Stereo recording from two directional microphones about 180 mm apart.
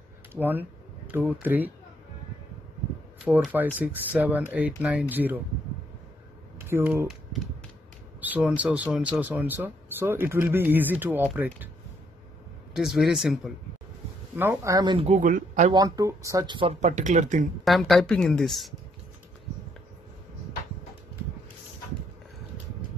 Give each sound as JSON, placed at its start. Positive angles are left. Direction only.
{"t": 0.3, "sound": "speech", "side_deg": -10}
{"t": 3.7, "sound": "speech", "side_deg": -10}
{"t": 6.7, "sound": "speech", "side_deg": -15}
{"t": 8.2, "sound": "speech", "side_deg": -10}
{"t": 12.7, "sound": "a woman's voice", "side_deg": 0}
{"t": 14.3, "sound": "speech", "side_deg": -15}
{"t": 15.0, "sound": "speech", "side_deg": -45}
{"t": 15.7, "sound": "speech", "side_deg": -20}
{"t": 16.8, "sound": "speech", "side_deg": -40}
{"t": 17.6, "sound": "a woman's voice", "side_deg": 0}